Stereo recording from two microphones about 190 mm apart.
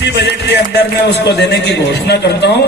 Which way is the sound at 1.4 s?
60° left (ahead or behind).